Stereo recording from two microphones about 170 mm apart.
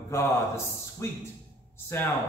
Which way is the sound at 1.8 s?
15° left (ahead or behind).